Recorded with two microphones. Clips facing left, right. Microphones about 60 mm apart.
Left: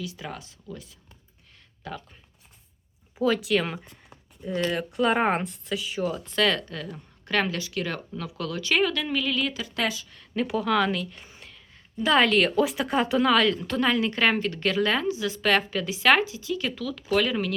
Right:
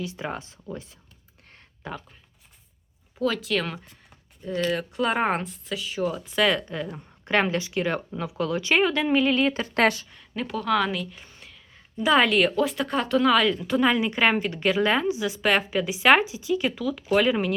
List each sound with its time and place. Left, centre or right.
0.0 s speech: right
3.2 s speech: centre; by 10.1 s right
10.4 s a woman's voice: centre